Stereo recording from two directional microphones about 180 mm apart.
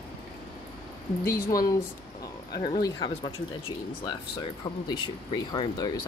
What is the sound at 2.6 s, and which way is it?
Speech, 25° left (ahead or behind).